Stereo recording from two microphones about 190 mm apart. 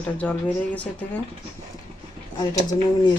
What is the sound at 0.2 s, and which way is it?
A woman's voice, 10° left (ahead or behind).